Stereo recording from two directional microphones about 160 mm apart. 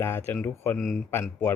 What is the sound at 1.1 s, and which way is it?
Speech, 15° left (ahead or behind).